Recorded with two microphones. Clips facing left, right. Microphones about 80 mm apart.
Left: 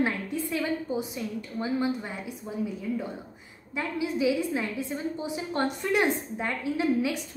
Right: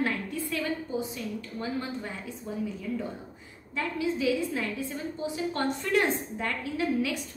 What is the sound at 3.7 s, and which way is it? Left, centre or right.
A woman's voice, centre.